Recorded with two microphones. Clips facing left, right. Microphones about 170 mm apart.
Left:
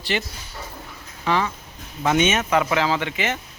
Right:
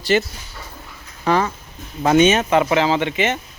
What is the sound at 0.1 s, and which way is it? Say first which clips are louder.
Speech: right 8 dB; 45° right (ahead or behind).